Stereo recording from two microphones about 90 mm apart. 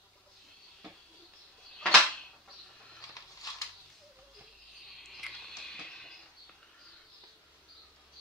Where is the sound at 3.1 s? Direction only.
40° left (ahead or behind).